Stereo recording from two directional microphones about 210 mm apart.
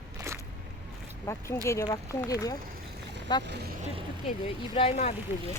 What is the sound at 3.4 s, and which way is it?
Speech, 50° right (ahead or behind).